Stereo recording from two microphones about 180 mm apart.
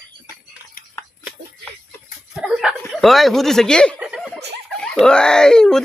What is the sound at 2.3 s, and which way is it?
Snicker, 5° right (ahead or behind).